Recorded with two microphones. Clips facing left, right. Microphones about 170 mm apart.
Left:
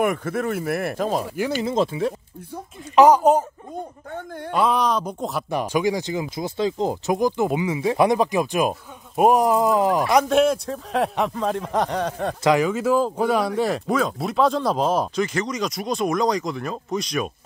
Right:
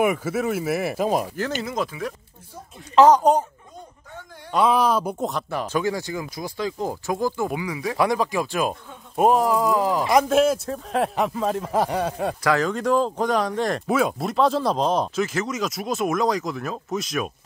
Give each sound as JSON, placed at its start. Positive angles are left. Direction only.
{"t": 0.0, "sound": "speech", "side_deg": -5}
{"t": 1.3, "sound": "speech", "side_deg": 10}
{"t": 1.7, "sound": "speech", "side_deg": 30}
{"t": 3.0, "sound": "speech", "side_deg": 10}
{"t": 4.1, "sound": "a man's voice", "side_deg": 55}
{"t": 4.5, "sound": "speech", "side_deg": 0}
{"t": 5.5, "sound": "speech", "side_deg": 15}
{"t": 10.0, "sound": "speech", "side_deg": 0}
{"t": 12.4, "sound": "speech", "side_deg": 10}